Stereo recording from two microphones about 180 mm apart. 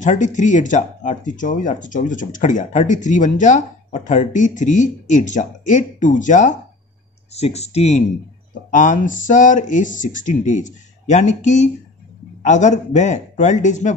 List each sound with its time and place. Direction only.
0.0 s speech: 45° left (ahead or behind)